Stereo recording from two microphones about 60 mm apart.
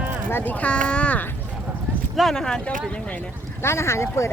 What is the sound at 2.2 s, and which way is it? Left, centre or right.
Speech, centre.